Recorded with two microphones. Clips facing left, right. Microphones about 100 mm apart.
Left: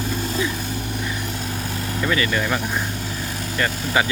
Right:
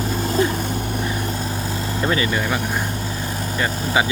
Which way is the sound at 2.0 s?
30° right (ahead or behind).